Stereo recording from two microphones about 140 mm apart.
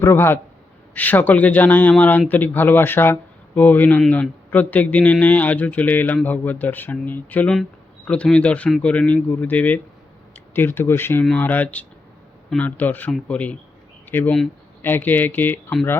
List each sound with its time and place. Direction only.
0.0 s speech: 15° left (ahead or behind)